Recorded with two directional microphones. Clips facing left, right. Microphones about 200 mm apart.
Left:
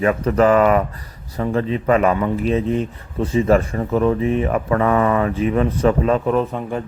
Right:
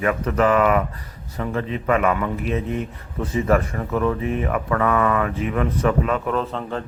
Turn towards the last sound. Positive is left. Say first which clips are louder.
# left 4 dB
turn(degrees=15)  # may be behind; listen again after turning